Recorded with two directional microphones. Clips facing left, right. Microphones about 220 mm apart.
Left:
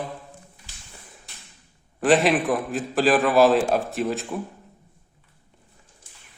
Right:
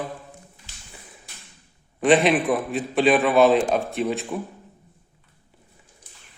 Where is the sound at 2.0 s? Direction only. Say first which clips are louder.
Right 1 dB; centre (ahead or behind).